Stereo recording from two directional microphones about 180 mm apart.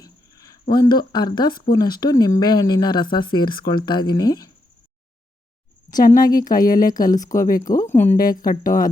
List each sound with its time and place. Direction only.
0.0 s a sound: 20° left (ahead or behind)
0.7 s speech: 25° left (ahead or behind)
6.1 s speech: 20° left (ahead or behind)
8.4 s speech: 50° left (ahead or behind)